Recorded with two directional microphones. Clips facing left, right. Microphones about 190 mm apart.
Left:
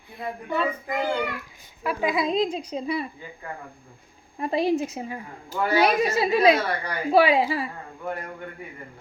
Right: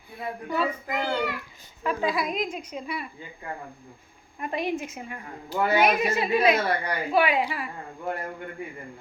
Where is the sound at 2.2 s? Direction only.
30° left (ahead or behind).